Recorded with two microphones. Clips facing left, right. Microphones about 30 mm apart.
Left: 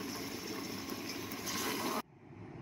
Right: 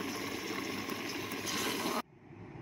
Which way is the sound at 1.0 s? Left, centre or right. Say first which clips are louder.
Right 4 dB; right.